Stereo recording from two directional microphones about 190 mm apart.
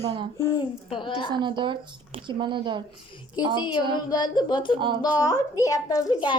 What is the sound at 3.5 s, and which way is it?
A child's voice, 25° left (ahead or behind).